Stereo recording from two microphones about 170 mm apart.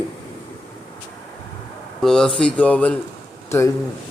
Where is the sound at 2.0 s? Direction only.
5° left (ahead or behind).